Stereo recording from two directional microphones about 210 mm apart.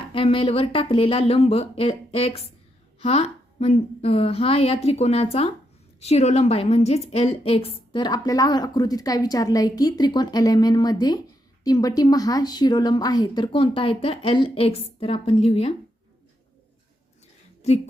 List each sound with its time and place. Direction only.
0.1 s a woman's voice: 25° left (ahead or behind)